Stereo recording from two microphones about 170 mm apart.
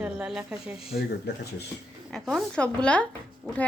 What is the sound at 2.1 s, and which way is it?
Speech, centre (ahead or behind).